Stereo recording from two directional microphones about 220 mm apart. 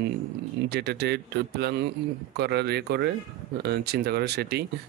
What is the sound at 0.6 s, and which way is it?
Speech, 50° right (ahead or behind).